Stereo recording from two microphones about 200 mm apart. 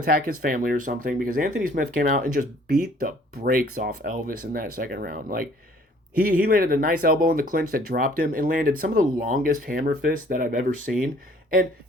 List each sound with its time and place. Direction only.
0.0 s speech: 45° right (ahead or behind)